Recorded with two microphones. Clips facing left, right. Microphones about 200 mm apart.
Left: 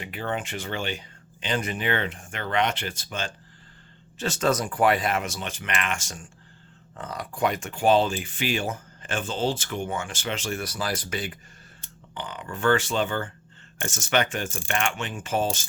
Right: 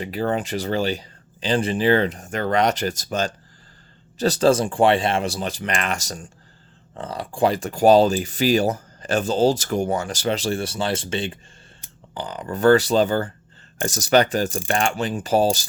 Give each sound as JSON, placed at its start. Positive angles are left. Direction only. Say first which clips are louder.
{"t": 0.0, "sound": "speech", "louder": "right 7 dB", "side_deg": -35}